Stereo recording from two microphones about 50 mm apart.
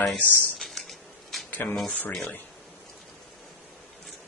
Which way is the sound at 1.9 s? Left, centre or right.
Left.